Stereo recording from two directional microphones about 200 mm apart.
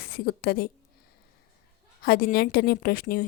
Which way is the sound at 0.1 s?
50° left (ahead or behind).